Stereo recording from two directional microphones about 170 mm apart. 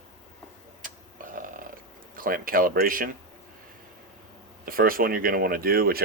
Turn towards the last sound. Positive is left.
turn(degrees=-60)  # may be behind; listen again after turning